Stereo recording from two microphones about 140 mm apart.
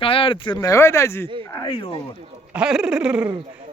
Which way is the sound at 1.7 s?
40° left (ahead or behind).